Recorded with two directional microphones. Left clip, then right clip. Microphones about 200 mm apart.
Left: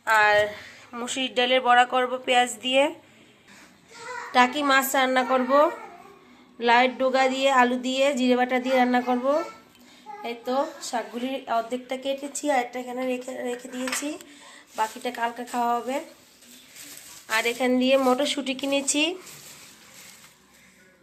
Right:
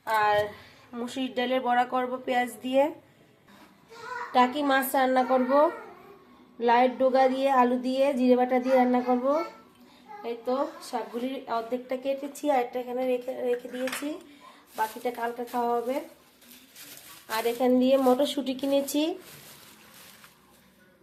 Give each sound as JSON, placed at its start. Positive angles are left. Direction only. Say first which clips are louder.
{"t": 0.0, "sound": "a woman's voice", "louder": "left 5 dB", "side_deg": -5}
{"t": 4.3, "sound": "a woman's voice", "louder": "left 3 dB", "side_deg": -5}
{"t": 6.6, "sound": "a woman's voice", "louder": "left 2 dB", "side_deg": -5}
{"t": 10.2, "sound": "speech", "louder": "left 2 dB", "side_deg": 15}
{"t": 12.3, "sound": "a woman's voice", "louder": "left 1 dB", "side_deg": -5}
{"t": 14.8, "sound": "speech", "louder": "left 3 dB", "side_deg": 5}
{"t": 17.2, "sound": "a woman's voice", "louder": "left 2 dB", "side_deg": -10}